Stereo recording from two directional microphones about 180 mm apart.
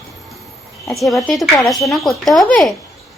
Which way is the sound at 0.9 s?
Centre (ahead or behind).